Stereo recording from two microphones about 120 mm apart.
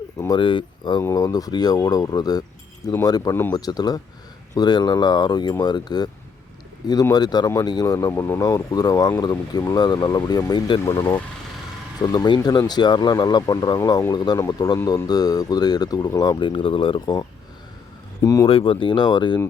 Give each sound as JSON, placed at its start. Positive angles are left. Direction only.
{"t": 0.3, "sound": "speech", "side_deg": 45}
{"t": 1.0, "sound": "speech", "side_deg": 30}
{"t": 7.1, "sound": "speech", "side_deg": 35}
{"t": 16.4, "sound": "speech", "side_deg": 45}
{"t": 18.2, "sound": "speech", "side_deg": 30}
{"t": 18.4, "sound": "speech", "side_deg": 45}